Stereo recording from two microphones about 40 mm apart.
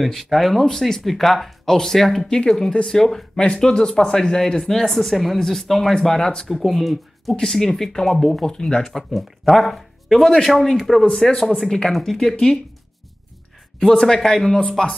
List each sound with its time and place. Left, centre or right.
0.0 s speech: centre
3.3 s speech: left; by 5.9 s centre
5.9 s speech: centre
6.5 s speech: centre
7.3 s speech: centre
13.7 s speech: centre